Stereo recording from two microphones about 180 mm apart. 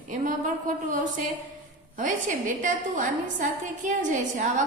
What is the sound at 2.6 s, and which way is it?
A woman's voice, 45° right (ahead or behind).